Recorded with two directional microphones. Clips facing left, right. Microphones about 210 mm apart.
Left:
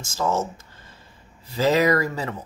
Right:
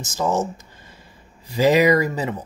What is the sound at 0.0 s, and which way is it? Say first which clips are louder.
Speech: right 2 dB; 15° right (ahead or behind).